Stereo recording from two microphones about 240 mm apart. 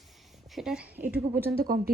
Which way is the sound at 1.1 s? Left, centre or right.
Right.